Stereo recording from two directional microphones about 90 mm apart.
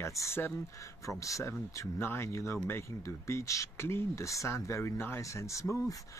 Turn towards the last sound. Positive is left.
turn(degrees=35)  # may be behind; listen again after turning